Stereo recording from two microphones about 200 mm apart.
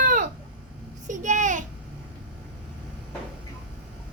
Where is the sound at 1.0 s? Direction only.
40° right (ahead or behind).